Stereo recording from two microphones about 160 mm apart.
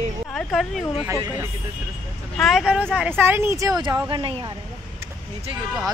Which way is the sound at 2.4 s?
Centre (ahead or behind).